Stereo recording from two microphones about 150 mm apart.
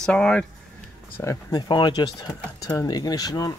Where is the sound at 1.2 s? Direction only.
25° left (ahead or behind).